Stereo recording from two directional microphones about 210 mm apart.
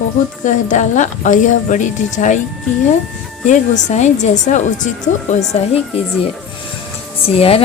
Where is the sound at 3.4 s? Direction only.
35° left (ahead or behind).